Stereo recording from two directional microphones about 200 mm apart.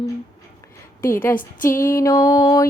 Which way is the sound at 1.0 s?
10° left (ahead or behind).